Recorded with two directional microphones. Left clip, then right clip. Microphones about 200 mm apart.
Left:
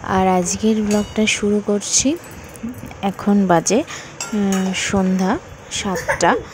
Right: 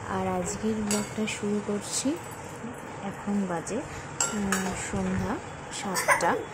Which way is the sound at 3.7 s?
45° left (ahead or behind).